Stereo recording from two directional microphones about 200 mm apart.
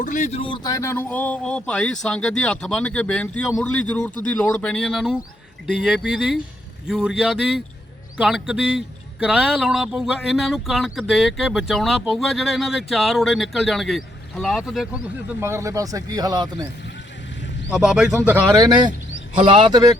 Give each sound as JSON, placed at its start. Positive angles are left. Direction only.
{"t": 0.0, "sound": "speech", "side_deg": 40}
{"t": 15.4, "sound": "speech", "side_deg": -15}
{"t": 17.7, "sound": "speech", "side_deg": 0}
{"t": 18.5, "sound": "speech", "side_deg": -20}